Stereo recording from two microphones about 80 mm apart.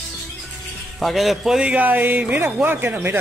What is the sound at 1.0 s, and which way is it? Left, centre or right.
A man's voice, centre.